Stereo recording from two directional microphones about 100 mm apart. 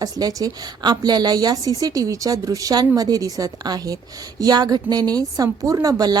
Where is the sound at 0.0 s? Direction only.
35° right (ahead or behind).